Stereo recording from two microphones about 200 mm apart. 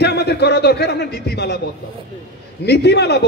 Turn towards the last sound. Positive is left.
turn(degrees=55)  # may be behind; listen again after turning